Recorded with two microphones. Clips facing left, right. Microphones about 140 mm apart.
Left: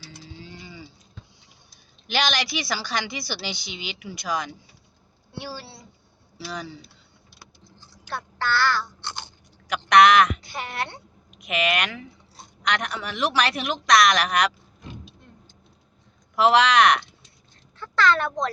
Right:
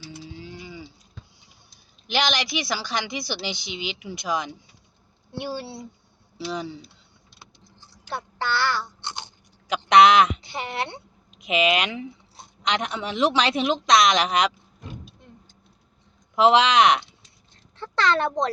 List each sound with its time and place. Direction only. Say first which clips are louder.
0.2 s cattle: right 3 dB; 15° right (ahead or behind)
2.0 s speech: right 1 dB; 15° right (ahead or behind)
8.1 s speech: left 1 dB; 20° right (ahead or behind)
16.3 s a child's voice: right 1 dB; 20° right (ahead or behind)